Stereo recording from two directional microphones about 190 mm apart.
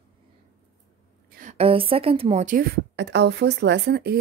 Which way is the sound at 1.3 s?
40° right (ahead or behind).